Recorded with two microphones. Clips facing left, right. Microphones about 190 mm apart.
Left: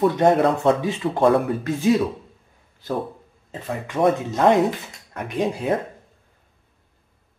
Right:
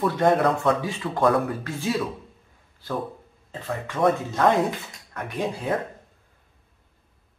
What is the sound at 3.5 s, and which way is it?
Speech, 20° left (ahead or behind).